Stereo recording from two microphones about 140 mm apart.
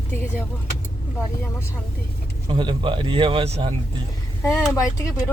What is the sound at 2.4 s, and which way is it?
Speech, 35° right (ahead or behind).